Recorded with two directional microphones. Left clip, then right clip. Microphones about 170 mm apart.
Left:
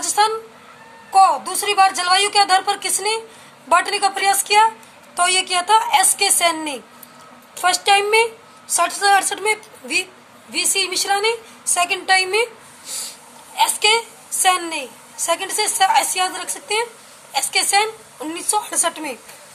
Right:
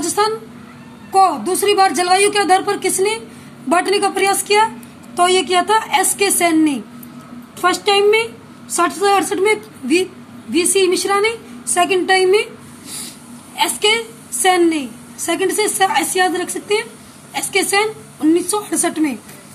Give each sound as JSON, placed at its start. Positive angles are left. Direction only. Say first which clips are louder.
{"t": 0.0, "sound": "a sound", "louder": "even", "side_deg": 20}
{"t": 1.1, "sound": "a woman's voice", "louder": "even", "side_deg": 10}
{"t": 7.6, "sound": "a woman's voice", "louder": "right 2 dB", "side_deg": 35}
{"t": 13.6, "sound": "a woman's voice", "louder": "even", "side_deg": 20}